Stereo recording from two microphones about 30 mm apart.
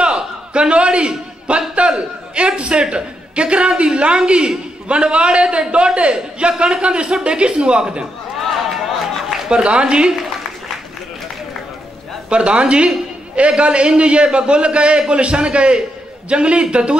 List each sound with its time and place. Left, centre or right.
0.0 s a sound: right
1.8 s a man's voice: right
9.5 s a man's voice: right
12.3 s a man's voice: right